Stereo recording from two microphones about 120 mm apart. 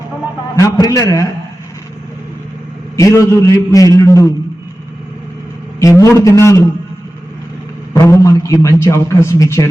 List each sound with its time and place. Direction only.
0.5 s a man's voice: 30° left (ahead or behind)
2.9 s a man's voice: 25° left (ahead or behind)
5.8 s a man's voice: 25° left (ahead or behind)
7.9 s a man's voice: 25° left (ahead or behind)